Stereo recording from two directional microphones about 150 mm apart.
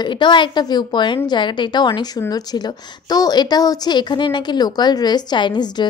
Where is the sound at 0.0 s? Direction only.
30° left (ahead or behind).